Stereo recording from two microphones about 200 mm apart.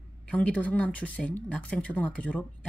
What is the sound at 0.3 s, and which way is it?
Speech, 5° left (ahead or behind).